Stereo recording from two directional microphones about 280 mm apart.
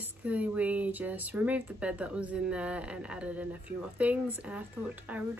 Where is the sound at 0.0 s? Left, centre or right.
Centre.